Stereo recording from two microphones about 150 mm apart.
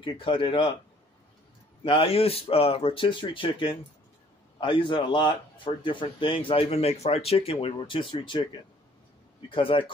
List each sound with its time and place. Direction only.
0.0 s speech: 35° left (ahead or behind)
1.9 s speech: 35° left (ahead or behind)